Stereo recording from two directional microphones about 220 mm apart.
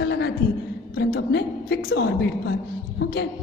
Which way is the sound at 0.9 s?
50° left (ahead or behind).